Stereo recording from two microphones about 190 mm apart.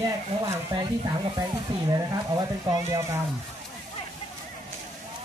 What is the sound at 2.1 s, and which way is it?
Speech, 20° right (ahead or behind).